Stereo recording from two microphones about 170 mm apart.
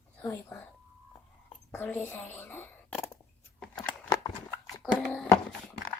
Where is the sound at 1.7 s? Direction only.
10° left (ahead or behind).